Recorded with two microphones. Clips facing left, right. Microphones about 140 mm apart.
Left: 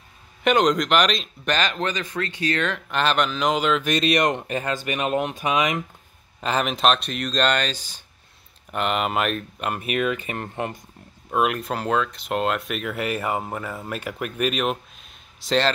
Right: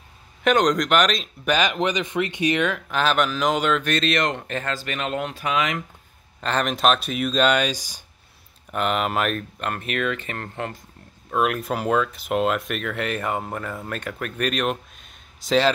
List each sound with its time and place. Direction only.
0.4 s speech: centre (ahead or behind); by 2.7 s 15° right (ahead or behind)
2.7 s speech: centre (ahead or behind)
3.9 s speech: 15° left (ahead or behind)
6.4 s speech: 5° left (ahead or behind); by 8.0 s 10° right (ahead or behind)
8.7 s speech: centre (ahead or behind); by 10.8 s 20° left (ahead or behind)
11.2 s speech: 5° left (ahead or behind)